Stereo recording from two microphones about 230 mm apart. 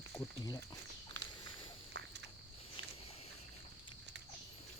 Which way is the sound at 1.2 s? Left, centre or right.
Right.